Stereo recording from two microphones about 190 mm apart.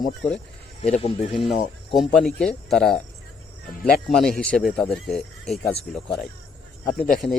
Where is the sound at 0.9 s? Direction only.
35° left (ahead or behind).